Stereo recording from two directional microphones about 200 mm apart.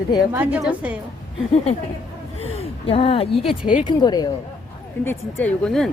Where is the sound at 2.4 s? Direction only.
30° left (ahead or behind).